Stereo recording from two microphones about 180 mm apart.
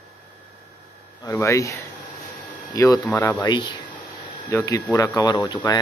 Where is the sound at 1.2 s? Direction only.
15° left (ahead or behind).